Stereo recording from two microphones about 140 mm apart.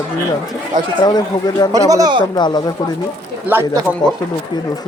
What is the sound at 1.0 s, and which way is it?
Speech, 30° left (ahead or behind).